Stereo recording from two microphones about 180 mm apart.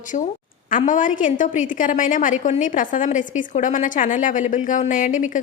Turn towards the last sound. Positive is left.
turn(degrees=45)  # may be behind; listen again after turning